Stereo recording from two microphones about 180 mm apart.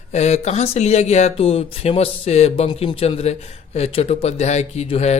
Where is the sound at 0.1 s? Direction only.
35° left (ahead or behind).